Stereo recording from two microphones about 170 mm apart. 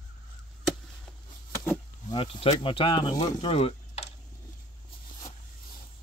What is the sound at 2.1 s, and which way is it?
Speech, 35° left (ahead or behind).